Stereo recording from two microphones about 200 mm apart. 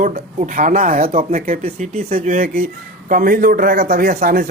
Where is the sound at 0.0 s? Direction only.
40° right (ahead or behind).